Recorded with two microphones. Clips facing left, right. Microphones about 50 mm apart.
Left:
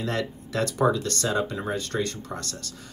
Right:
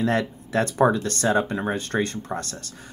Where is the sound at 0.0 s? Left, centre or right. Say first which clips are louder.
Right 5 dB; right.